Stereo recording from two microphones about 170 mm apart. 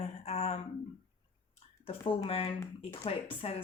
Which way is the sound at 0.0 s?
40° left (ahead or behind).